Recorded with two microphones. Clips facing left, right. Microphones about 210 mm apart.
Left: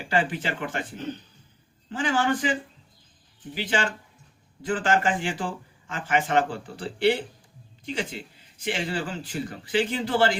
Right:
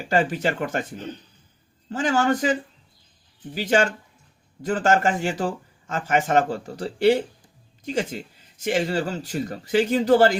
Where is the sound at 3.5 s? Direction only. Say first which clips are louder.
Right 6 dB; 45° right (ahead or behind).